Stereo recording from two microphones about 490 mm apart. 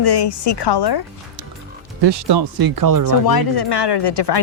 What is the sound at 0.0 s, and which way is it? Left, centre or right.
A woman's voice, left.